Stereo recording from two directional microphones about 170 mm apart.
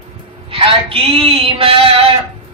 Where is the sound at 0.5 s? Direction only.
30° right (ahead or behind).